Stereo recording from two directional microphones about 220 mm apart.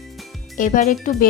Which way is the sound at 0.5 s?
35° left (ahead or behind).